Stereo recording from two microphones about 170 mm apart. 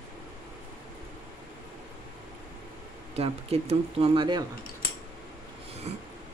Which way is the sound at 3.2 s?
35° right (ahead or behind).